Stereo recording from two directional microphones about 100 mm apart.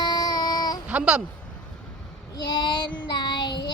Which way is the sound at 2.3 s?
45° left (ahead or behind).